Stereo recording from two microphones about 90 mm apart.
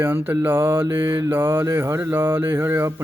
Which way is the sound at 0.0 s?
25° right (ahead or behind).